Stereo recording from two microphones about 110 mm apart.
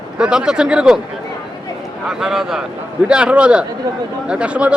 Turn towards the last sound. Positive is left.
turn(degrees=-10)  # may be behind; listen again after turning